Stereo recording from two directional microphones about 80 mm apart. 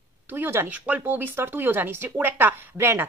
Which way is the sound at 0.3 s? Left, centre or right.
Right.